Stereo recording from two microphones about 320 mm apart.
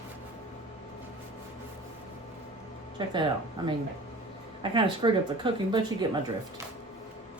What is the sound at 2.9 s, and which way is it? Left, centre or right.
Speech, centre.